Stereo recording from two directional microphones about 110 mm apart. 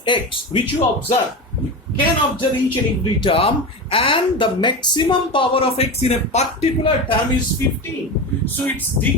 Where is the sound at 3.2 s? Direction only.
55° left (ahead or behind).